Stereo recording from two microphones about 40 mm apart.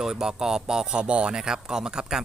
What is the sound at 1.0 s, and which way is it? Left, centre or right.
Speech, right.